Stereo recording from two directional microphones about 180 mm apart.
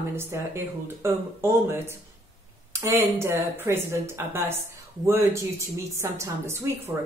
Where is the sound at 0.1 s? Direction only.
15° right (ahead or behind).